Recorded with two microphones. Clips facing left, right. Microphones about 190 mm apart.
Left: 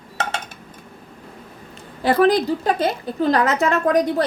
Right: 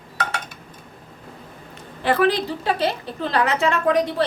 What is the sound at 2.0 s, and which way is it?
A woman's voice, 40° left (ahead or behind).